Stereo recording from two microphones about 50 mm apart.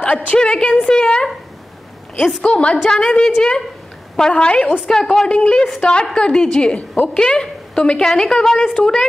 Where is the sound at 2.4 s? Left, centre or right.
Left.